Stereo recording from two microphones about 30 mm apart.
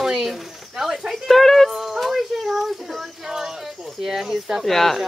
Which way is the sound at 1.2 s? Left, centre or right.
Centre.